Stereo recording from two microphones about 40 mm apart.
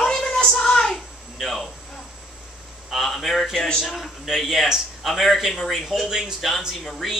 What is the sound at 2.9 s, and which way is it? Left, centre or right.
Speech, centre.